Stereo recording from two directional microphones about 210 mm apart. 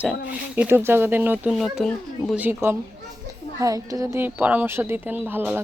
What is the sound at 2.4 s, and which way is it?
A woman's voice, 10° right (ahead or behind).